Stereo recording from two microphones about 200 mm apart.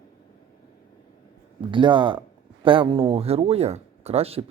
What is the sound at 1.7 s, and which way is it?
Speech, 25° right (ahead or behind).